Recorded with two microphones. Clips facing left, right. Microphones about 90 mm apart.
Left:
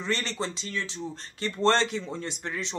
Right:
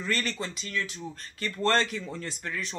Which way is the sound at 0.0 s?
25° left (ahead or behind).